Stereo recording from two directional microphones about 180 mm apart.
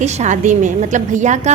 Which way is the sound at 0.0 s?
40° right (ahead or behind).